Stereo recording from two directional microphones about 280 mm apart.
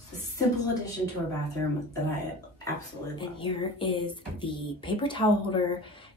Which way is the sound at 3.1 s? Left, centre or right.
Centre.